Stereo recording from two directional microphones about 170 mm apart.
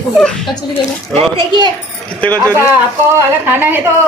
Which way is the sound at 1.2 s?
30° right (ahead or behind).